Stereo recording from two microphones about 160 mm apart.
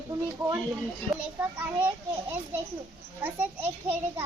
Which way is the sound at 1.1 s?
10° right (ahead or behind).